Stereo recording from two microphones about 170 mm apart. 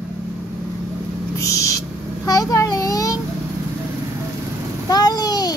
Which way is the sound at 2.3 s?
20° left (ahead or behind).